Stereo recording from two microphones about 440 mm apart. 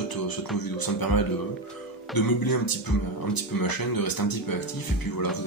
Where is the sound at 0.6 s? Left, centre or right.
Left.